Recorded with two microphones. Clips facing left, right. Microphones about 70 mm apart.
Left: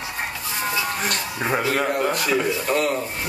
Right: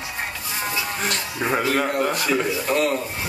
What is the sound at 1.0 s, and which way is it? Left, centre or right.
A man's voice, centre.